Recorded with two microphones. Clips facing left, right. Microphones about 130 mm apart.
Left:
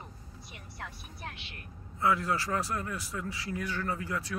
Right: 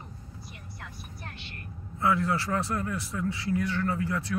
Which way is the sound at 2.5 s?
25° right (ahead or behind).